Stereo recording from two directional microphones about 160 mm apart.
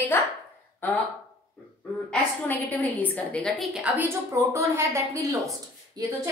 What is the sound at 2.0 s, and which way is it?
A woman's voice, 10° left (ahead or behind).